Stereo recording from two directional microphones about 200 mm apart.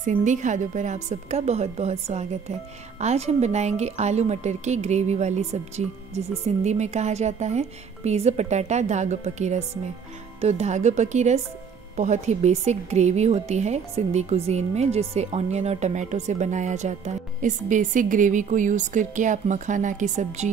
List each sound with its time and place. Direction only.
0.0 s a woman's voice: 40° right (ahead or behind)